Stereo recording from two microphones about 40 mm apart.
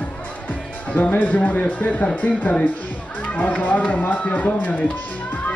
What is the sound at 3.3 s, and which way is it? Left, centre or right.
Speech, left.